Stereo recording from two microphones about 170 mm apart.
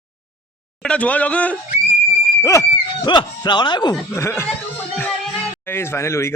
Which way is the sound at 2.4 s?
20° left (ahead or behind).